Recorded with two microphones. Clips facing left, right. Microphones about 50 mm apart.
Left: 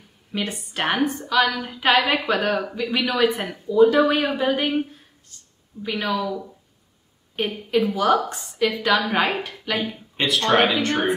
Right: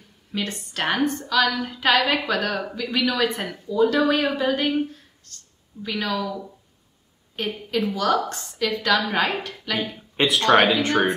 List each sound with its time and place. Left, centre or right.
0.3 s a woman's voice: centre
10.1 s speech: centre